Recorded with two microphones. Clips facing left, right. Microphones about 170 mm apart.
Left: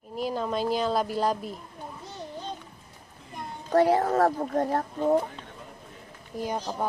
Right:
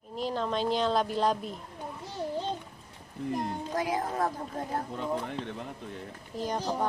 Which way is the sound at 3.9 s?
75° left (ahead or behind).